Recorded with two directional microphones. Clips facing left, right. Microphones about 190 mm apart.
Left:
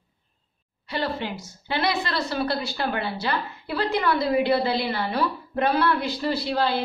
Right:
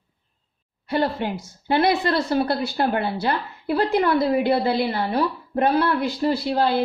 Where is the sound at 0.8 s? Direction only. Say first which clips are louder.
Right 5 dB; 55° right (ahead or behind).